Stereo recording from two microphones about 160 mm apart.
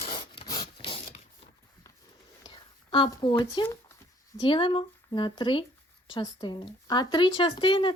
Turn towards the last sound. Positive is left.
turn(degrees=30)  # may be behind; listen again after turning